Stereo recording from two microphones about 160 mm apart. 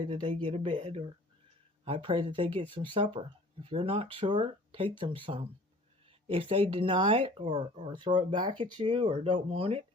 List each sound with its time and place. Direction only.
0.1 s speech: 30° right (ahead or behind)